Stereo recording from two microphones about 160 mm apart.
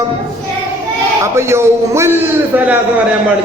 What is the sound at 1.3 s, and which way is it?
A man's voice, 15° right (ahead or behind).